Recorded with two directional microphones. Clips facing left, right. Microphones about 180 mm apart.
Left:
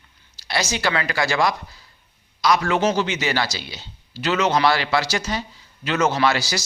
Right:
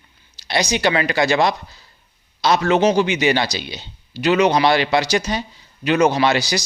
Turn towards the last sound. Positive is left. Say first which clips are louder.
# right 3 dB
turn(degrees=-15)  # may be behind; listen again after turning